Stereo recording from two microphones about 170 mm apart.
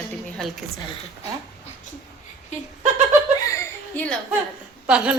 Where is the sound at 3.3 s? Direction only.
20° left (ahead or behind).